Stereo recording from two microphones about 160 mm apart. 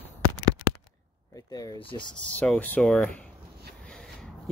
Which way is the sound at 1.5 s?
25° left (ahead or behind).